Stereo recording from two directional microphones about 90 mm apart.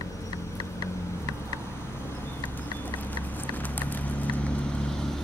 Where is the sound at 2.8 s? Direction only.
20° left (ahead or behind).